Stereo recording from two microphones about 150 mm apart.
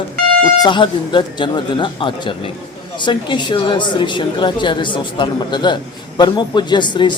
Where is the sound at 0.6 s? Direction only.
30° left (ahead or behind).